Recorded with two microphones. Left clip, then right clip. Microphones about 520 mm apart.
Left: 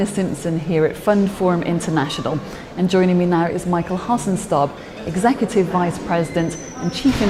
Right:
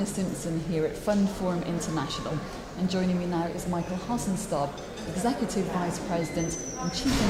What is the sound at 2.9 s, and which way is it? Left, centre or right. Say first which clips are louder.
Speech: left 14 dB; left.